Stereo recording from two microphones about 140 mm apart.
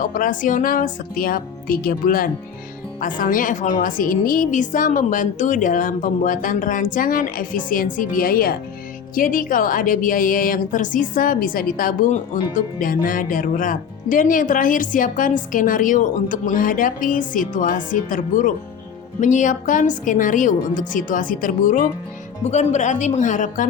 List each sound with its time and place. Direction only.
0.0 s speech: 75° left (ahead or behind)
3.0 s a woman's voice: 75° left (ahead or behind); by 8.5 s 90° left
9.1 s a woman's voice: 75° left (ahead or behind)
22.4 s speech: 55° left (ahead or behind)